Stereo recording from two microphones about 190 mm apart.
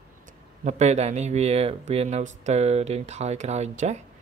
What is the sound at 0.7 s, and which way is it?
Speech, 35° right (ahead or behind).